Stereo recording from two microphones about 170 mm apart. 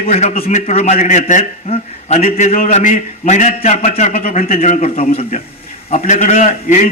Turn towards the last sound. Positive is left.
turn(degrees=45)  # may be behind; listen again after turning